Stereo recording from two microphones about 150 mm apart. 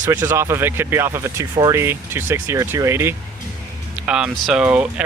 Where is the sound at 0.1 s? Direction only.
15° right (ahead or behind).